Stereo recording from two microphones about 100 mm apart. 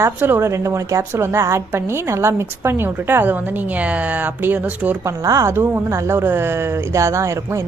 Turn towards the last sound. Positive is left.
turn(degrees=-30)  # may be behind; listen again after turning